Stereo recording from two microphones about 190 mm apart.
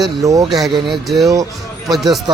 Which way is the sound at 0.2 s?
15° right (ahead or behind).